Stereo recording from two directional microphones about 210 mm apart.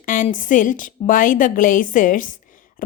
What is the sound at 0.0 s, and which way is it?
A woman's voice, 40° left (ahead or behind).